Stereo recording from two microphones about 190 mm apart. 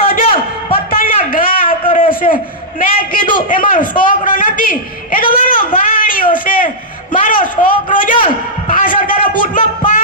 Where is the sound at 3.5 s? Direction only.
45° left (ahead or behind).